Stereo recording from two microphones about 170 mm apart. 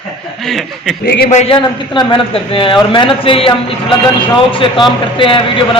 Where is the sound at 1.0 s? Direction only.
70° left (ahead or behind).